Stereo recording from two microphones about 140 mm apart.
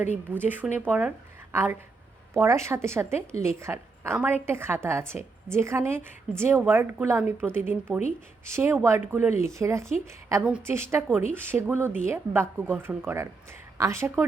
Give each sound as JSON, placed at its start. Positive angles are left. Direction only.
{"t": 0.3, "sound": "a woman's voice", "side_deg": -15}